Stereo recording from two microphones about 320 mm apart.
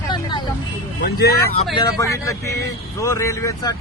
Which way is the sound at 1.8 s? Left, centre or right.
Centre.